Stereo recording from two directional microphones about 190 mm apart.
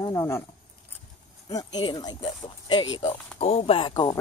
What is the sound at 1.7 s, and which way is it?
Speech, 20° left (ahead or behind).